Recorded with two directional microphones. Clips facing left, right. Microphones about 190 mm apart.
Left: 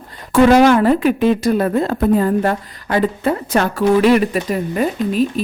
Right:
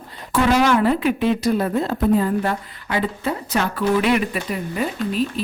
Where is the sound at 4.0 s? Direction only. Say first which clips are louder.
Left 6 dB; 40° left (ahead or behind).